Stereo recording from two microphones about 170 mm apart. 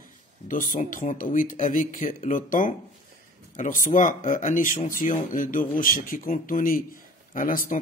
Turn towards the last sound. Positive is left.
turn(degrees=55)  # may be behind; listen again after turning